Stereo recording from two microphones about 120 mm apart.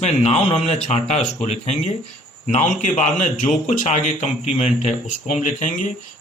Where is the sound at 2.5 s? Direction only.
90° left.